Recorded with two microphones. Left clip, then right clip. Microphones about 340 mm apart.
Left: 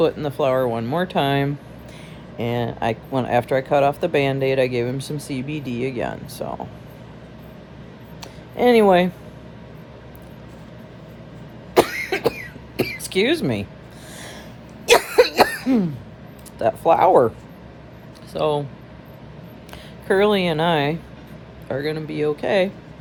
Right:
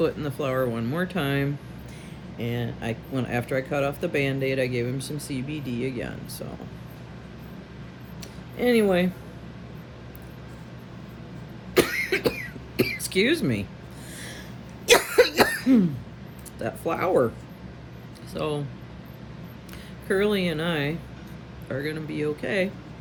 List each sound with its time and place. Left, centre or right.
0.0 s speech: centre
8.2 s a sound: centre
11.7 s cough: centre
14.8 s cough: centre
16.6 s speech: centre
18.3 s speech: centre
20.1 s speech: centre